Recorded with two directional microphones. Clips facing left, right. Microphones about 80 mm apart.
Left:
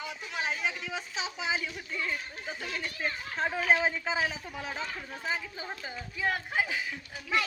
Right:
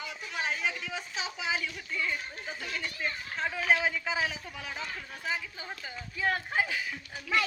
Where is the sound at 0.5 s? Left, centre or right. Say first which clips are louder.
Even; centre.